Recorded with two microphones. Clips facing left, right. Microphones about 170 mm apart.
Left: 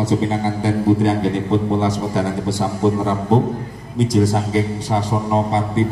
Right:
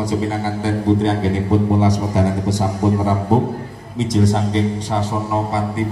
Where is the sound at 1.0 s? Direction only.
Centre (ahead or behind).